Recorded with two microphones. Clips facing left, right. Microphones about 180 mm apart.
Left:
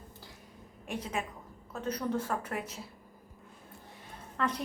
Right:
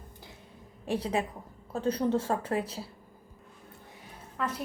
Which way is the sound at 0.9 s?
30° right (ahead or behind).